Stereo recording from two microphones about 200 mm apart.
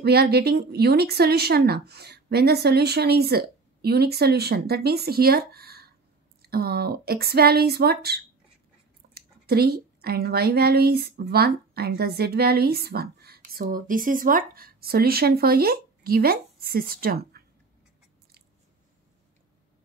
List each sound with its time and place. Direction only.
0.0 s a woman's voice: 50° right (ahead or behind)